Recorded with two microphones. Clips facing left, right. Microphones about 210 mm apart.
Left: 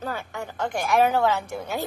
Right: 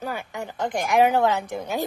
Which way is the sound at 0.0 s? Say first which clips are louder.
Right 1 dB; 15° right (ahead or behind).